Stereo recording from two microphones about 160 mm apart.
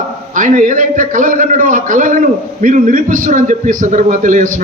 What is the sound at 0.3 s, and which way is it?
A man's voice, 50° right (ahead or behind).